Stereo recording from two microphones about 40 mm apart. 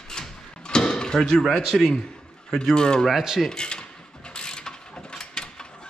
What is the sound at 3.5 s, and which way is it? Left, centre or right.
Mechanisms, left.